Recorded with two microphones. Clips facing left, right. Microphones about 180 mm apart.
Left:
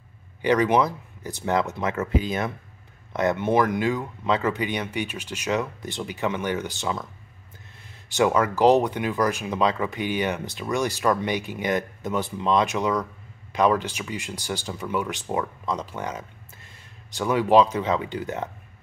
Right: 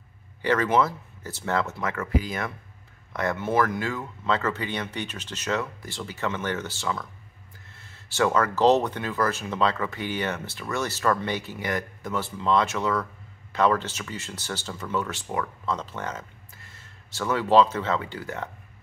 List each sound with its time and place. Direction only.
0.4 s speech: 15° left (ahead or behind)